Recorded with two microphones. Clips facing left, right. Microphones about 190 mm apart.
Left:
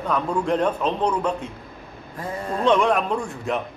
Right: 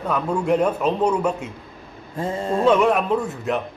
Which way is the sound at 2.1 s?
25° right (ahead or behind).